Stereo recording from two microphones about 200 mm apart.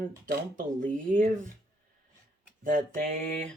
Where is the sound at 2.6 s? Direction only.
40° right (ahead or behind).